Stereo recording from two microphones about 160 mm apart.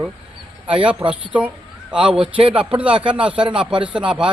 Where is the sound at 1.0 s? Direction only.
15° right (ahead or behind).